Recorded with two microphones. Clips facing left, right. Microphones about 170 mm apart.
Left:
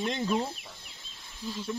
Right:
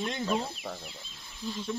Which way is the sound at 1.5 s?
5° left (ahead or behind).